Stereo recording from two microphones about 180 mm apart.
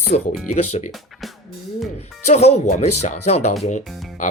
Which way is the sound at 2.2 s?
35° left (ahead or behind).